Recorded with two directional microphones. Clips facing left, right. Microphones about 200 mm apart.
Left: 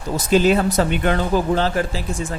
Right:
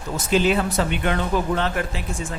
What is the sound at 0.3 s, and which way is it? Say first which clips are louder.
Speech: left 4 dB; 40° left (ahead or behind).